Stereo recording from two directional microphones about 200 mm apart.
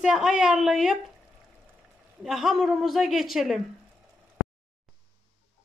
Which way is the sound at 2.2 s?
Centre (ahead or behind).